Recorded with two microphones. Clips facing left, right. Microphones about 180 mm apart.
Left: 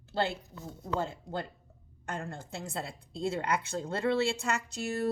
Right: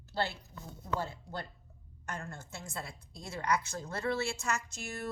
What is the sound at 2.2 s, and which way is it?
A woman's voice, 30° left (ahead or behind).